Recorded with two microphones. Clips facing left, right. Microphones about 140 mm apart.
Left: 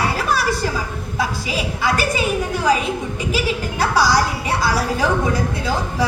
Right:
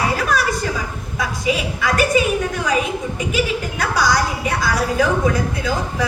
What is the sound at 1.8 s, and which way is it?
Speech, 30° left (ahead or behind).